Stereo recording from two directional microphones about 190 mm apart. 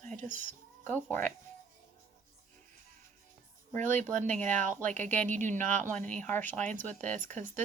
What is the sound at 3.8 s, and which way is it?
Speech, 40° right (ahead or behind).